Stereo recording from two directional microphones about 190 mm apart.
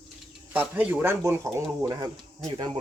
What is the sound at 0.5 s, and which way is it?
Speech, 10° right (ahead or behind).